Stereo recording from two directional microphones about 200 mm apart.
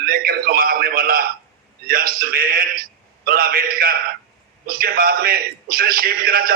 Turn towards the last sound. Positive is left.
turn(degrees=-45)  # may be behind; listen again after turning